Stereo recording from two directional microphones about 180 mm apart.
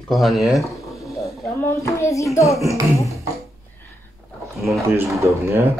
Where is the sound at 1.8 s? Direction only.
15° left (ahead or behind).